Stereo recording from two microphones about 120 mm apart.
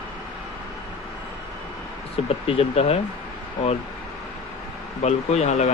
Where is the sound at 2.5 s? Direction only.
55° left (ahead or behind).